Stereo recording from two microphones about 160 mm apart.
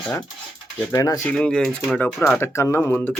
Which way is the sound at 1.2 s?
5° left (ahead or behind).